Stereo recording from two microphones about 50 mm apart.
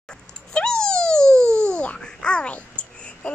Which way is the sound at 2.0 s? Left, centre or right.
Centre.